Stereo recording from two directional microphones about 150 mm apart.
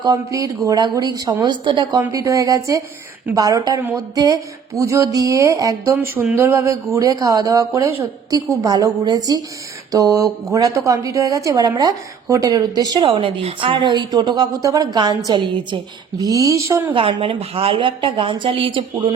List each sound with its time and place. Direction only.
0.0 s a woman's voice: 25° right (ahead or behind)
16.9 s a woman's voice: 35° right (ahead or behind)